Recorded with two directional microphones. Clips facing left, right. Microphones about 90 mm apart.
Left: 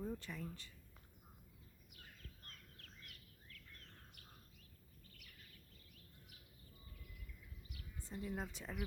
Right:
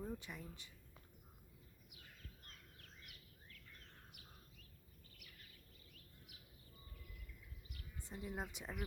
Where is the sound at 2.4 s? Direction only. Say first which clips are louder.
Left 1 dB; 10° right (ahead or behind).